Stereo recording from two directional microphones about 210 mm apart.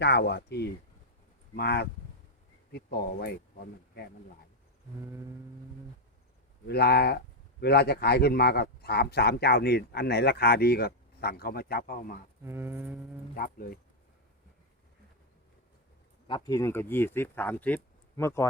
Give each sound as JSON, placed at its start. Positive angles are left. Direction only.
{"t": 0.0, "sound": "speech", "side_deg": 55}
{"t": 6.7, "sound": "speech", "side_deg": 50}
{"t": 12.5, "sound": "a sound", "side_deg": -10}
{"t": 13.3, "sound": "speech", "side_deg": 45}
{"t": 16.2, "sound": "speech", "side_deg": 20}